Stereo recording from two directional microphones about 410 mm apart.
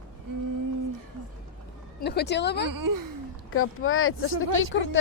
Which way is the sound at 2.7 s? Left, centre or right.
Right.